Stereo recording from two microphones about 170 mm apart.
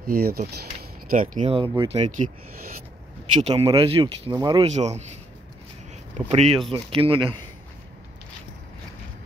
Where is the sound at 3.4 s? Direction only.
35° right (ahead or behind).